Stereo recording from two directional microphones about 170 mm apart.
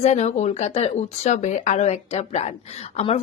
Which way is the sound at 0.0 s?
40° left (ahead or behind).